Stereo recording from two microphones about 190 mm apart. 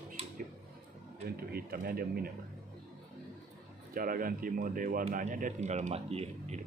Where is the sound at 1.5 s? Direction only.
55° right (ahead or behind).